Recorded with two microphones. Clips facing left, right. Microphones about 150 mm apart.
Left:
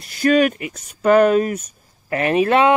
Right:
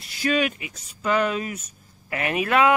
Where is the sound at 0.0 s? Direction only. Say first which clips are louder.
Left 8 dB; 50° left (ahead or behind).